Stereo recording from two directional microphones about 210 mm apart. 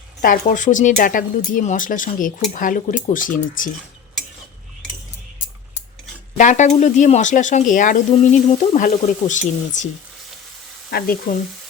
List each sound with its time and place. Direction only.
0.2 s speech: 40° left (ahead or behind)
6.3 s speech: 35° left (ahead or behind)
10.9 s speech: 45° left (ahead or behind)